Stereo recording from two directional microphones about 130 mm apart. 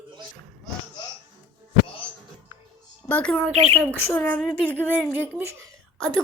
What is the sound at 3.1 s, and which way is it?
Speech, 10° left (ahead or behind).